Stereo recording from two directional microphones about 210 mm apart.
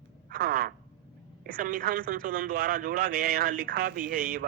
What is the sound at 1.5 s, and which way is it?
A man's voice, 40° right (ahead or behind).